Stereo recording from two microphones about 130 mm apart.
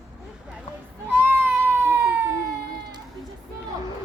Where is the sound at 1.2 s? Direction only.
15° right (ahead or behind).